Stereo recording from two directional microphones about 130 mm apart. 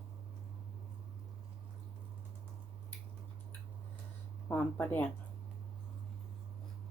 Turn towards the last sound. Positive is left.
turn(degrees=15)  # may be behind; listen again after turning